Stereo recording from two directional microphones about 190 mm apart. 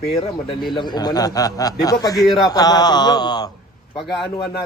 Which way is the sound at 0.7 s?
25° left (ahead or behind).